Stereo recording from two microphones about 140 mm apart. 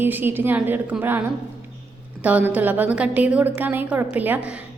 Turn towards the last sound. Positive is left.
turn(degrees=-10)  # may be behind; listen again after turning